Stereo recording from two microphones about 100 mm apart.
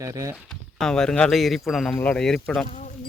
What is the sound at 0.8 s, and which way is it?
Speech, 5° left (ahead or behind).